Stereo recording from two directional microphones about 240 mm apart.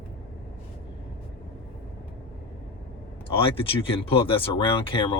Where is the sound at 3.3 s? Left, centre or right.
Left.